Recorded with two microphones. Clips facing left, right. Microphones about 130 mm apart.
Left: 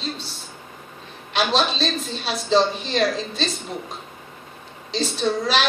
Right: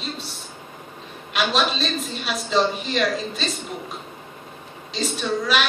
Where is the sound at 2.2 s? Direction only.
35° left (ahead or behind).